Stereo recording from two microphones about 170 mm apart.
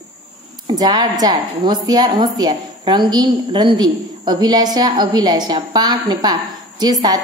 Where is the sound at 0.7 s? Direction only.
25° right (ahead or behind).